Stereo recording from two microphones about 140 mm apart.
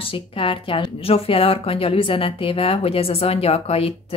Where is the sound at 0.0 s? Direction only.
40° left (ahead or behind).